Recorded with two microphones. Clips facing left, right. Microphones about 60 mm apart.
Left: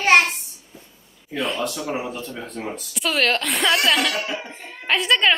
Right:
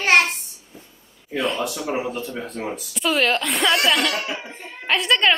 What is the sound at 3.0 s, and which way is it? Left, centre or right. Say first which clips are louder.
Speech: right 1 dB; centre.